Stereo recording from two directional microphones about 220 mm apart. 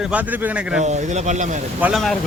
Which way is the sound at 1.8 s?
Centre (ahead or behind).